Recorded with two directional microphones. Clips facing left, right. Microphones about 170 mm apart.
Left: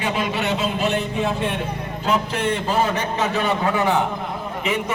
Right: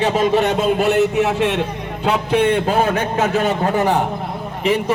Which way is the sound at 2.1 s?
60° right (ahead or behind).